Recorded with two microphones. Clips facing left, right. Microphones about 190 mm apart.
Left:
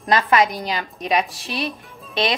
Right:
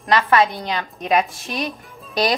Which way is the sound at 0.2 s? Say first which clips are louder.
Right 1 dB; 15° left (ahead or behind).